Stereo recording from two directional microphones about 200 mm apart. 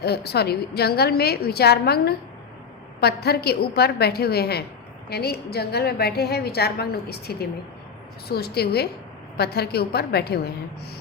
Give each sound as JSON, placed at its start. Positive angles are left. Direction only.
{"t": 0.0, "sound": "a woman's voice", "side_deg": 55}